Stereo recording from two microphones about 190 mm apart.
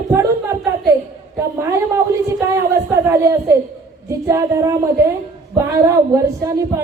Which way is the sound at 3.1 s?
15° right (ahead or behind).